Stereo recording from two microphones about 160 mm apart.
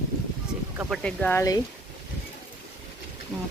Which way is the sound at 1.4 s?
20° left (ahead or behind).